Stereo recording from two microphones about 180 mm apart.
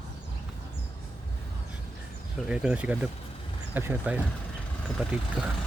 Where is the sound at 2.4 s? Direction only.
5° right (ahead or behind).